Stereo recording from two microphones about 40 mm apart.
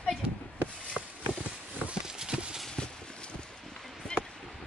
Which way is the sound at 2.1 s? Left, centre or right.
Centre.